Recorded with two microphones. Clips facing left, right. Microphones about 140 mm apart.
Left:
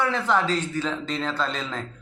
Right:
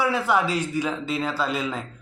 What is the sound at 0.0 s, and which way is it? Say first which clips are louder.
A man's voice: right 1 dB; 10° right (ahead or behind).